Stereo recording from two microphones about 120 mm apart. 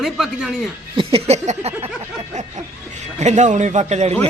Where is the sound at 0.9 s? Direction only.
50° right (ahead or behind); by 1.8 s 65° right (ahead or behind).